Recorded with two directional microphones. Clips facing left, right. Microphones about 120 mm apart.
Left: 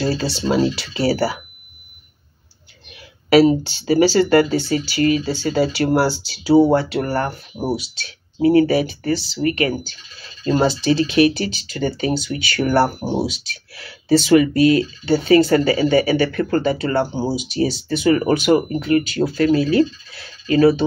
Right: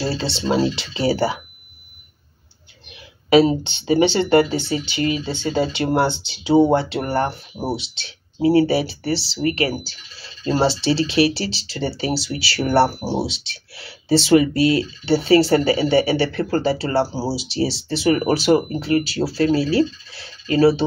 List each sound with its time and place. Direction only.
0.0 s speech: 30° right (ahead or behind)
3.3 s speech: 25° right (ahead or behind)